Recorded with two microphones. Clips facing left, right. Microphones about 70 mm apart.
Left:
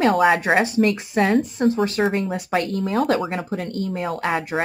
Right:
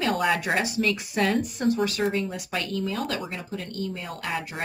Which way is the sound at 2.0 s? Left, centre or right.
Left.